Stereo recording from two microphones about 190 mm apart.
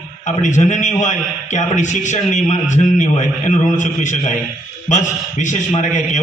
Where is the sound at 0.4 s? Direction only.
40° left (ahead or behind).